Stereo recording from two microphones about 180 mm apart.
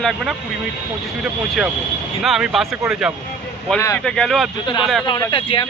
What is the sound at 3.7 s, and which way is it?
Speech, 15° left (ahead or behind).